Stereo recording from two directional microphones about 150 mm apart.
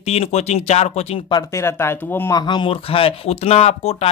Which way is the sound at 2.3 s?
30° left (ahead or behind).